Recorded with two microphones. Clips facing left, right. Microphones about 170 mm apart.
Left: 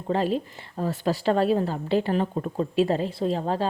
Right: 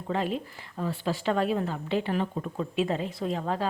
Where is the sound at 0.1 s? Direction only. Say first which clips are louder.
Left 5 dB; 35° left (ahead or behind).